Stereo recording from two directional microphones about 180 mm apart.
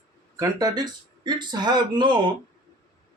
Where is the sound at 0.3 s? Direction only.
20° right (ahead or behind).